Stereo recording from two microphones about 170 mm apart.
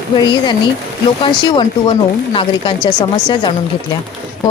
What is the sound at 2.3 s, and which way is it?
Speech, 25° left (ahead or behind).